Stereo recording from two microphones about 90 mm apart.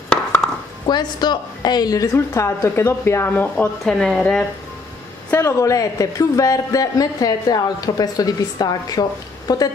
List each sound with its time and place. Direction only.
0.8 s a man's voice: 55° left (ahead or behind)
2.1 s speech: 30° left (ahead or behind)
3.5 s speech: 5° left (ahead or behind)
5.4 s a man's voice: 35° left (ahead or behind)